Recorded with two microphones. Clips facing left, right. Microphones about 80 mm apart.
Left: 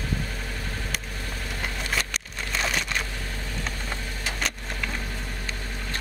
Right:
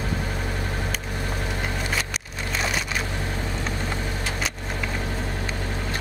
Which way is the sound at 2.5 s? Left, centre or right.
Centre.